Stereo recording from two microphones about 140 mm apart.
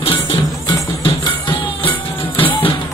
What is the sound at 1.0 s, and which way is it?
Music, 35° left (ahead or behind).